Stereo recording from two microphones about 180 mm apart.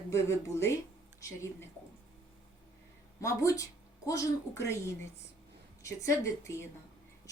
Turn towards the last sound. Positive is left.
turn(degrees=15)  # may be behind; listen again after turning